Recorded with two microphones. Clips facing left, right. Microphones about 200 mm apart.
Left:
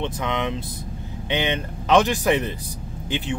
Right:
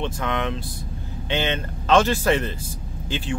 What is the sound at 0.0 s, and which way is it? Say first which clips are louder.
Speech: even; 20° left (ahead or behind).